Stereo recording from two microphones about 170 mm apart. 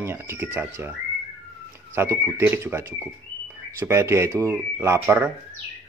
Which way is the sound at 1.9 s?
15° right (ahead or behind).